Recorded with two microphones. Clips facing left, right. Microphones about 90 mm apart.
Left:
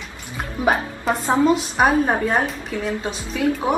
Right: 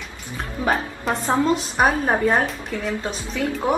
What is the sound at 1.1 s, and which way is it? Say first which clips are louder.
A woman's voice: left 3 dB; centre (ahead or behind).